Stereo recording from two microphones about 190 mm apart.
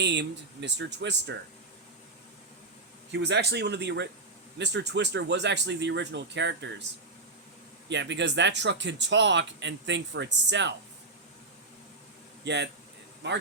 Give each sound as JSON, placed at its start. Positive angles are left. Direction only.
{"t": 0.0, "sound": "speech", "side_deg": -65}
{"t": 3.1, "sound": "speech", "side_deg": -65}
{"t": 7.9, "sound": "speech", "side_deg": -65}
{"t": 12.5, "sound": "speech", "side_deg": -65}